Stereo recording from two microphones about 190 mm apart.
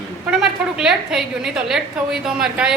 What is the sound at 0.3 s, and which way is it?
A woman's voice, 5° right (ahead or behind).